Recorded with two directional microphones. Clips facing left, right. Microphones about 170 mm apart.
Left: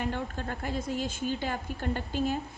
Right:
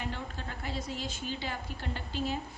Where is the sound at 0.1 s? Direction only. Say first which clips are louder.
Left 6 dB; 50° left (ahead or behind).